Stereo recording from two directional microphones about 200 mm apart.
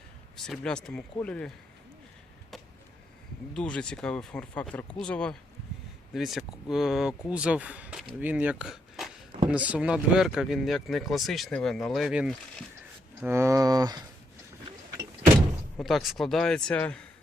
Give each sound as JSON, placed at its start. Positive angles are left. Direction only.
{"t": 0.3, "sound": "speech", "side_deg": 0}
{"t": 3.5, "sound": "speech", "side_deg": 5}
{"t": 13.2, "sound": "speech", "side_deg": -15}
{"t": 15.8, "sound": "speech", "side_deg": 0}